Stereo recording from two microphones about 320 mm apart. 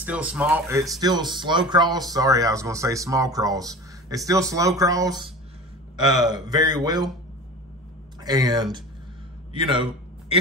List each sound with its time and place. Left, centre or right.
0.0 s speech: centre
8.2 s speech: centre
9.5 s a sound: centre